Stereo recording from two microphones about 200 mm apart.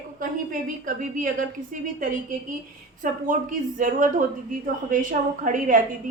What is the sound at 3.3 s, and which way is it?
A woman's voice, 40° right (ahead or behind).